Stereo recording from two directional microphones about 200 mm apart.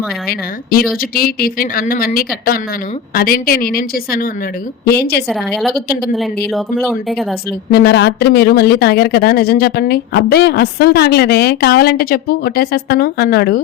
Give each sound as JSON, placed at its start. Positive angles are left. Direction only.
{"t": 0.3, "sound": "a woman's voice", "side_deg": 50}
{"t": 5.3, "sound": "speech", "side_deg": 0}
{"t": 7.7, "sound": "speech", "side_deg": 55}